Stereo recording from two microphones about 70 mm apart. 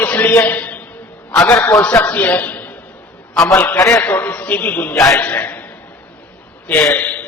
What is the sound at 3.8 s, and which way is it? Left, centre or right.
Speech, left.